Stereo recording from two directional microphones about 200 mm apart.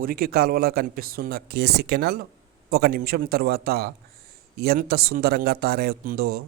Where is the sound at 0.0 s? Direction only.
50° right (ahead or behind).